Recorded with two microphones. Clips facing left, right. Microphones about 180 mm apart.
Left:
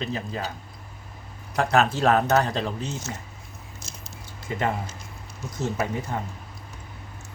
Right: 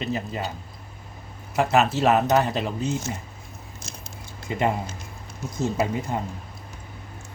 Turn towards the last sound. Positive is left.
turn(degrees=-10)  # may be behind; listen again after turning